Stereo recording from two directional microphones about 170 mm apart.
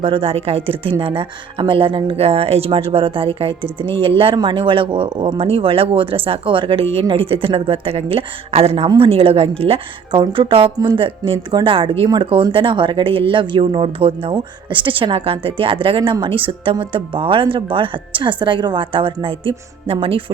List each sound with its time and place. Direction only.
0.0 s a woman's voice: 35° right (ahead or behind)